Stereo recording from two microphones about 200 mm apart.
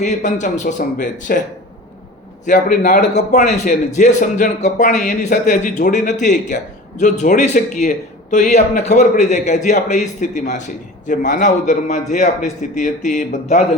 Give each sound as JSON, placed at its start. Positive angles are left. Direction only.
{"t": 0.0, "sound": "a man's voice", "side_deg": 35}
{"t": 2.5, "sound": "a man's voice", "side_deg": 40}